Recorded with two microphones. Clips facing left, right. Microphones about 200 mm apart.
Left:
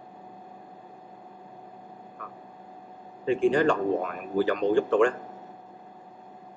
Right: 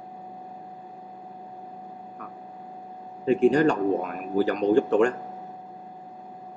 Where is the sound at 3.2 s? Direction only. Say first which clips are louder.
Right 3 dB; 40° right (ahead or behind).